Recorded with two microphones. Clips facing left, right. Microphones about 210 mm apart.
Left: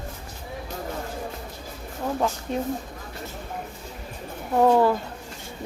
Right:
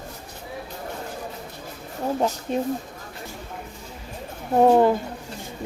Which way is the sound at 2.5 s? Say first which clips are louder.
Right 4 dB; 20° right (ahead or behind).